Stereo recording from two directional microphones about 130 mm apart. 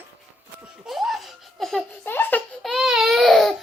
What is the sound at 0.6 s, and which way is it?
Laughter, 5° right (ahead or behind).